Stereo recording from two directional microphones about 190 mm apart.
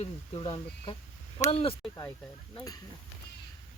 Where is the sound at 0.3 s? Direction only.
25° left (ahead or behind).